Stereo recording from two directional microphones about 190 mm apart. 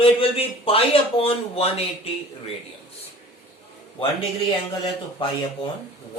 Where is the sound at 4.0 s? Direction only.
30° left (ahead or behind).